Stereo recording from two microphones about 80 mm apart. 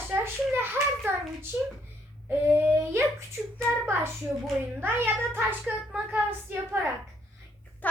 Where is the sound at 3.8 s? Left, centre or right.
Right.